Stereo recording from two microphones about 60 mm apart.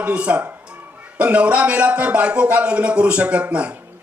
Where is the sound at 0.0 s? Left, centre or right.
Right.